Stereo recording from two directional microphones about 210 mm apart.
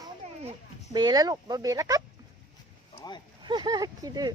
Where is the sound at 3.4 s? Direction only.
20° right (ahead or behind).